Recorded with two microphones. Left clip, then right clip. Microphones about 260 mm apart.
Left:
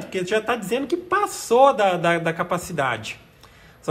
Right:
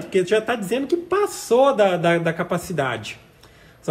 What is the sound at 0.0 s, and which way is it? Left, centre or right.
A man's voice, left.